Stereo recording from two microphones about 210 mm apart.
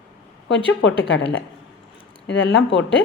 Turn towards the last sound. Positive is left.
turn(degrees=60)  # may be behind; listen again after turning